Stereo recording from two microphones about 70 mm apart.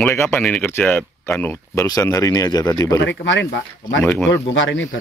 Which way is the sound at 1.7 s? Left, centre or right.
Left.